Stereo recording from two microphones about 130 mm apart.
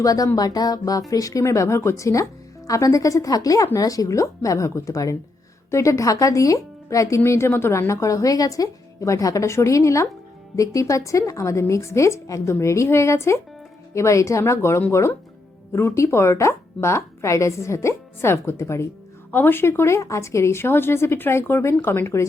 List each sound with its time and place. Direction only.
0.0 s speech: 25° left (ahead or behind)